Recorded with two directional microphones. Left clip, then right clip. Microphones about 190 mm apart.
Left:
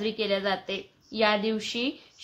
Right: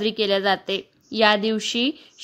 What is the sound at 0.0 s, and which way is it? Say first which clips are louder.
A woman's voice: right 6 dB; 50° right (ahead or behind).